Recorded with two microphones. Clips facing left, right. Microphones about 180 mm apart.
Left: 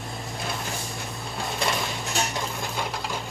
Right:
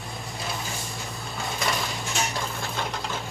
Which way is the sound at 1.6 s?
Centre (ahead or behind).